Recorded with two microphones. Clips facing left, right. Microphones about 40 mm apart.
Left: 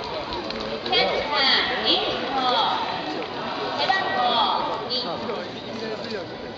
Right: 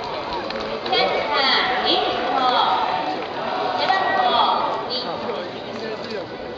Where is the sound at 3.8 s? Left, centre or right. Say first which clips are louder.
Right 3 dB; right.